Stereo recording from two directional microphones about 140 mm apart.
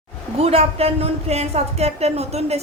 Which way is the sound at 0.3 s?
45° right (ahead or behind).